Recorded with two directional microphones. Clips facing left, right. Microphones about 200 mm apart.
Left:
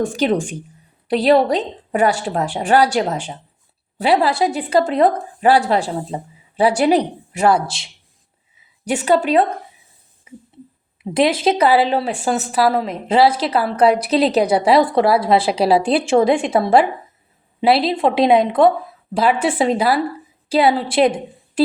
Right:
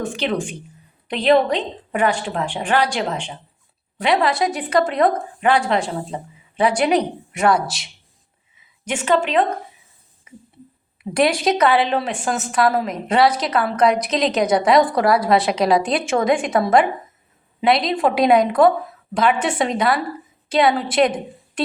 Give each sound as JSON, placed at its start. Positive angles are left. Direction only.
{"t": 0.1, "sound": "a woman's voice", "side_deg": 45}
{"t": 11.1, "sound": "a woman's voice", "side_deg": 25}